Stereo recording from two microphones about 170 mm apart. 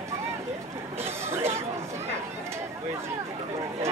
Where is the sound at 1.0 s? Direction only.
15° right (ahead or behind).